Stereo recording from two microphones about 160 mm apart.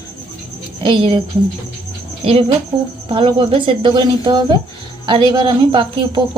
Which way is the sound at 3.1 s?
35° right (ahead or behind).